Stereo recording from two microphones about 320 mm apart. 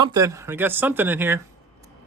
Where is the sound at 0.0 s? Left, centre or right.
Centre.